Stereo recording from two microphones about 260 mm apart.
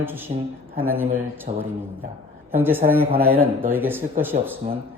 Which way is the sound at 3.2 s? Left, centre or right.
Right.